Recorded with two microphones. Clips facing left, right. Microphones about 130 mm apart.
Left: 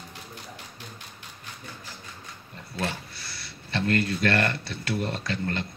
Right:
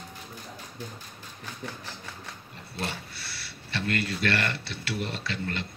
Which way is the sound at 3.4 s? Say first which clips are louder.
Left 4 dB; 40° left (ahead or behind).